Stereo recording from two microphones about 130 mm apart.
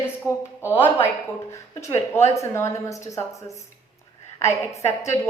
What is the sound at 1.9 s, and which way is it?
Speech, 20° left (ahead or behind).